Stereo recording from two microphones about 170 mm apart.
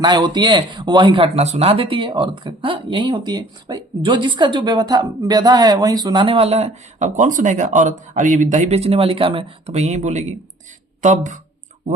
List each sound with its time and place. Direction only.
0.0 s speech: 25° right (ahead or behind); by 11.3 s 45° right (ahead or behind)